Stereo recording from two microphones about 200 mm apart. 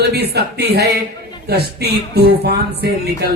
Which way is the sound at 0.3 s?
55° right (ahead or behind).